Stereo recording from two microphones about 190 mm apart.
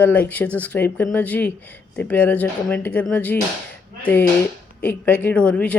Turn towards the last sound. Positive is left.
turn(degrees=5)  # may be behind; listen again after turning